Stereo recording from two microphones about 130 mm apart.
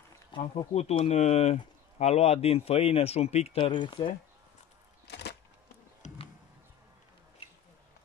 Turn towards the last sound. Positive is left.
turn(degrees=65)  # may be behind; listen again after turning